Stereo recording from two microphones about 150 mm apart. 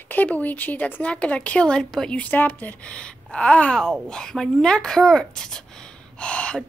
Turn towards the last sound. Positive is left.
turn(degrees=5)  # may be behind; listen again after turning